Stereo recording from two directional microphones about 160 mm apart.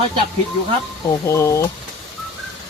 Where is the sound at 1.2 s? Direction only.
15° left (ahead or behind).